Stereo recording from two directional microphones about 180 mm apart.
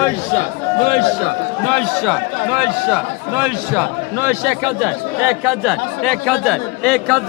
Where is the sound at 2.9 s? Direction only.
10° right (ahead or behind).